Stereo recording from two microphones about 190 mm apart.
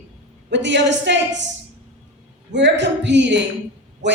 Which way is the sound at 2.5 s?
65° right (ahead or behind).